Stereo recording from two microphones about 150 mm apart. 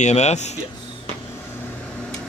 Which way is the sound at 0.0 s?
50° left (ahead or behind).